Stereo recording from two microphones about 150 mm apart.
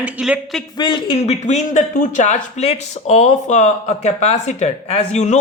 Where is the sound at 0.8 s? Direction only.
30° left (ahead or behind).